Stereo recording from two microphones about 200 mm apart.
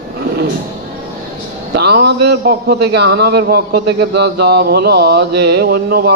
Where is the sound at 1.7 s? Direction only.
55° right (ahead or behind).